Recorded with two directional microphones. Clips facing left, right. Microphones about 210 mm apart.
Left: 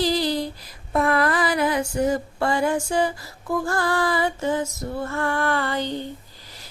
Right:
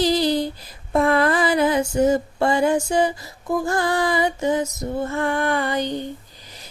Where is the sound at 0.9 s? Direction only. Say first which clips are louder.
Right 3 dB; 25° right (ahead or behind).